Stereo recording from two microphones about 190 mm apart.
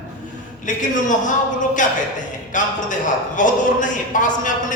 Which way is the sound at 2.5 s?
40° left (ahead or behind).